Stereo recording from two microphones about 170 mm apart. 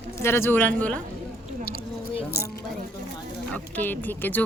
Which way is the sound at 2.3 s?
65° left (ahead or behind).